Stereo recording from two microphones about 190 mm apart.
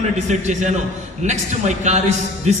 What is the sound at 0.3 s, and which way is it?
A man's voice, 40° right (ahead or behind).